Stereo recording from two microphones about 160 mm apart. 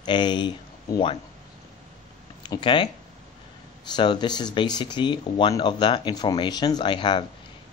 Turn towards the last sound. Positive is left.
turn(degrees=30)  # may be behind; listen again after turning